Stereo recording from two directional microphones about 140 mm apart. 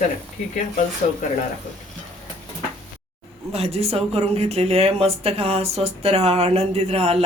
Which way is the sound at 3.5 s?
45° right (ahead or behind).